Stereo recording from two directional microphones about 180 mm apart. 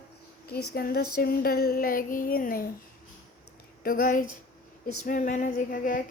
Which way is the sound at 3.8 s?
50° left (ahead or behind).